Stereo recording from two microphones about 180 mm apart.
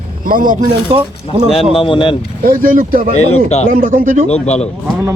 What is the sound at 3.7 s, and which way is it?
Speech, 50° right (ahead or behind).